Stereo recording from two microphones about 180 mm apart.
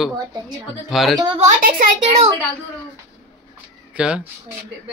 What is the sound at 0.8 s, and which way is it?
Speech, centre (ahead or behind).